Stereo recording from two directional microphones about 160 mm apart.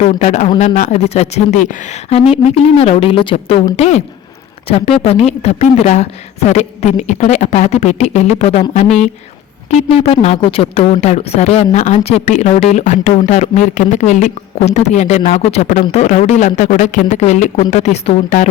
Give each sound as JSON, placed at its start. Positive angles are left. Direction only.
{"t": 0.0, "sound": "a woman's voice", "side_deg": 50}